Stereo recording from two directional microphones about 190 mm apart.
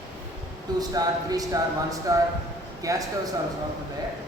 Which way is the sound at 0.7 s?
20° right (ahead or behind).